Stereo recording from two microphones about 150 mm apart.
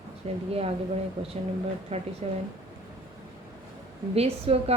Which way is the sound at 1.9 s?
45° right (ahead or behind).